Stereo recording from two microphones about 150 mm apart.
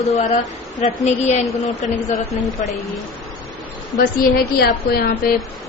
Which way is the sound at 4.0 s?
90° left.